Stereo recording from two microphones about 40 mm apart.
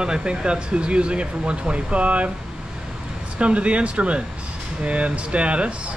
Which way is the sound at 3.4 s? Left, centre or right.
Right.